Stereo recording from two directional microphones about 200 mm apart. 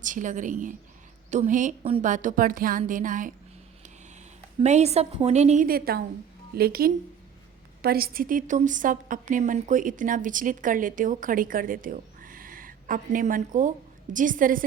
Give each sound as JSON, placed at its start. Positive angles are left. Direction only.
{"t": 0.0, "sound": "a woman's voice", "side_deg": -40}
{"t": 4.6, "sound": "a woman's voice", "side_deg": -35}
{"t": 5.6, "sound": "a woman's voice", "side_deg": -50}